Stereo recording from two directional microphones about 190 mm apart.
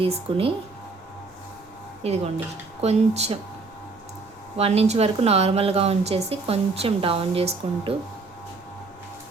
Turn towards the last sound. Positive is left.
turn(degrees=-30)  # may be behind; listen again after turning